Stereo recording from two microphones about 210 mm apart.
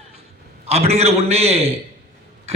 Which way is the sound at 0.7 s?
30° right (ahead or behind).